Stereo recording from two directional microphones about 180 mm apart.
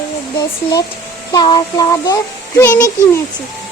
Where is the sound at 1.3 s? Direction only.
25° left (ahead or behind).